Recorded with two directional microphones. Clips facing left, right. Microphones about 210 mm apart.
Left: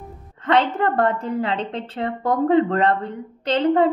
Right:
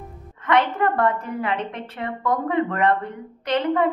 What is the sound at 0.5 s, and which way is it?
Speech, 30° left (ahead or behind).